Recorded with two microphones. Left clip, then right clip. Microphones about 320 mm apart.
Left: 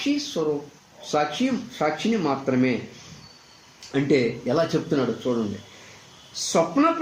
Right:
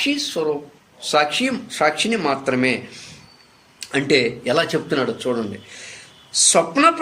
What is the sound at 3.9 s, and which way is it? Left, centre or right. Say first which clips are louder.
Speech: right 4 dB; right.